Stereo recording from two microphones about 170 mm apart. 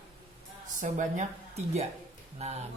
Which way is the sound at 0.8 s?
45° right (ahead or behind).